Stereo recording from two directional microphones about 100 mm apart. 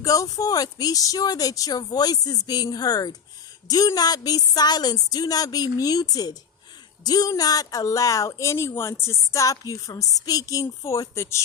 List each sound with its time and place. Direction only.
0.0 s speech: 35° left (ahead or behind)